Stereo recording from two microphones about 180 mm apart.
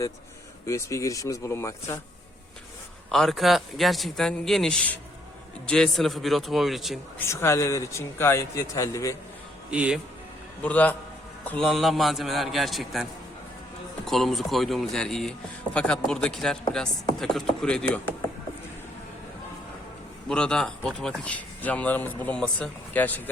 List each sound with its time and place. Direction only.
0.6 s speech: 15° left (ahead or behind)
3.1 s speech: centre (ahead or behind)
7.2 s speech: 15° left (ahead or behind)
9.6 s speech: 5° right (ahead or behind)
10.6 s speech: 10° left (ahead or behind)
14.1 s speech: centre (ahead or behind)
20.2 s speech: 5° left (ahead or behind)